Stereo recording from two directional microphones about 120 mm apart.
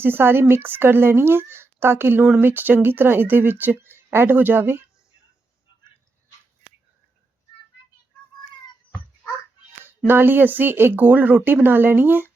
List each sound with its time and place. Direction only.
0.0 s speech: 20° right (ahead or behind)
10.1 s speech: 15° right (ahead or behind)